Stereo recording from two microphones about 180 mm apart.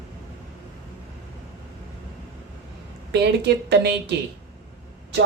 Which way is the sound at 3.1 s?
70° right (ahead or behind).